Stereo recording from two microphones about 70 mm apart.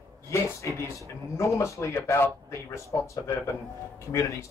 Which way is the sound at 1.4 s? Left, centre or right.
Left.